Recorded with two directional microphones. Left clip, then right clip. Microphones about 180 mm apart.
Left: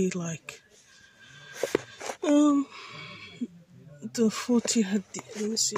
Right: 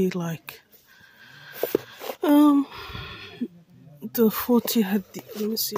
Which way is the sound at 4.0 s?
30° right (ahead or behind).